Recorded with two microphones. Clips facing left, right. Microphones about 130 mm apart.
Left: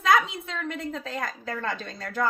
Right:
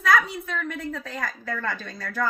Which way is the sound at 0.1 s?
20° left (ahead or behind).